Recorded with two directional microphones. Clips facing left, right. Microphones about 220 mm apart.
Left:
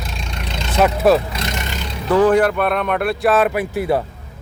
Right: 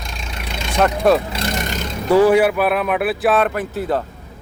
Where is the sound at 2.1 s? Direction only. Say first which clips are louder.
Right 1 dB; 10° right (ahead or behind); by 4.0 s 10° left (ahead or behind).